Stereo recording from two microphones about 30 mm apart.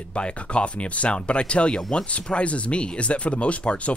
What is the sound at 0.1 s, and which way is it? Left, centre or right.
Speech, left.